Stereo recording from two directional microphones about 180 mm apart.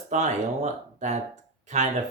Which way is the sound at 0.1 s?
40° right (ahead or behind).